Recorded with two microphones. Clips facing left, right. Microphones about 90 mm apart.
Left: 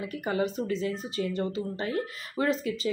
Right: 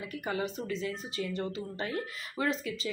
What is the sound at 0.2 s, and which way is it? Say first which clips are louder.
Speech: left 5 dB; 25° left (ahead or behind).